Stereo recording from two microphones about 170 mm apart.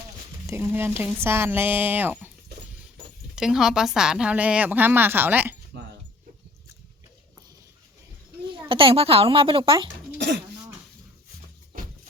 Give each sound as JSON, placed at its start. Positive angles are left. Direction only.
{"t": 0.4, "sound": "a woman's voice", "side_deg": -15}
{"t": 3.3, "sound": "a woman's voice", "side_deg": -5}
{"t": 8.7, "sound": "speech", "side_deg": -30}